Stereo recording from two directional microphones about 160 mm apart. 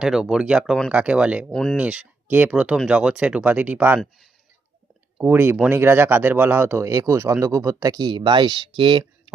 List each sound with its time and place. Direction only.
0.0 s speech: 5° right (ahead or behind)
1.5 s speech: 5° left (ahead or behind)
1.7 s speech: 5° right (ahead or behind)
5.1 s speech: 10° right (ahead or behind); by 9.3 s 30° right (ahead or behind)